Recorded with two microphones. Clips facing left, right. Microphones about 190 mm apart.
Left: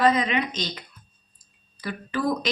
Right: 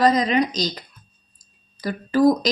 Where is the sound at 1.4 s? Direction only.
40° right (ahead or behind).